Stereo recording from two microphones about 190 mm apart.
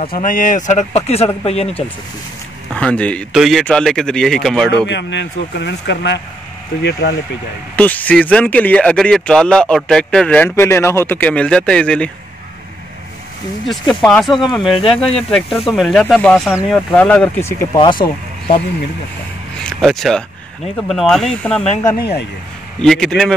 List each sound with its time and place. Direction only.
0.2 s speech: 45° left (ahead or behind)
2.7 s speech: 5° left (ahead or behind)
4.8 s speech: 70° left (ahead or behind)
7.7 s speech: 10° left (ahead or behind)
13.7 s speech: 5° left (ahead or behind)
17.7 s speech: 25° left (ahead or behind)
19.8 s speech: centre (ahead or behind)
22.8 s speech: 5° left (ahead or behind)